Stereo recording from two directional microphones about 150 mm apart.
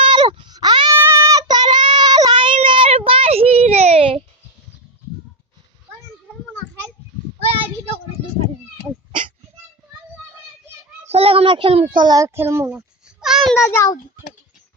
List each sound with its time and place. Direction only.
0.0 s a sound: 30° right (ahead or behind)
0.9 s child singing: 15° right (ahead or behind); by 4.2 s 40° right (ahead or behind)
11.1 s child singing: 40° right (ahead or behind)
12.0 s speech: 20° right (ahead or behind)
13.1 s a sound: 5° right (ahead or behind)
13.7 s a child's voice: 20° left (ahead or behind)